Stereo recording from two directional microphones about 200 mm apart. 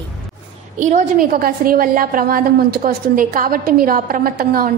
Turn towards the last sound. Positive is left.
turn(degrees=-45)  # may be behind; listen again after turning